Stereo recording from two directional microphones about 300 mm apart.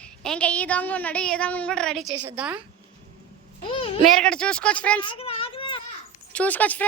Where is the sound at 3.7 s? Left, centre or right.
Centre.